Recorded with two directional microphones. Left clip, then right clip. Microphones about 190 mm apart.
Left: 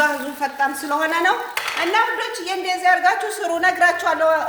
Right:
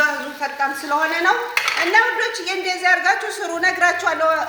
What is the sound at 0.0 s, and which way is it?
A woman's voice, 60° left (ahead or behind).